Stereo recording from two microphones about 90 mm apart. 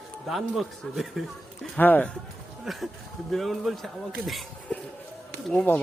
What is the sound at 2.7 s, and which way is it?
Speech, centre (ahead or behind).